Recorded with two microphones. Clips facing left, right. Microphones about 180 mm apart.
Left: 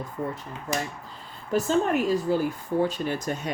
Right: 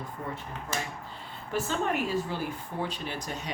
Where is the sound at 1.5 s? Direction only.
40° left (ahead or behind).